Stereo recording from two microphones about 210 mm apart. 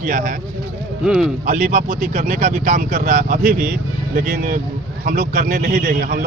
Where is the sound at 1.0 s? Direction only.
Centre (ahead or behind).